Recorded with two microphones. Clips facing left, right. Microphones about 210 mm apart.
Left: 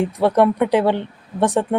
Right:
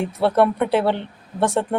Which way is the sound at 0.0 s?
15° left (ahead or behind).